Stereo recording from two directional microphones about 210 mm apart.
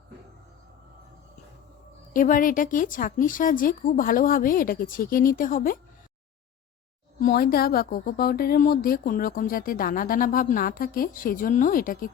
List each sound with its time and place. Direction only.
2.1 s speech: 40° left (ahead or behind)
7.2 s a woman's voice: 45° left (ahead or behind)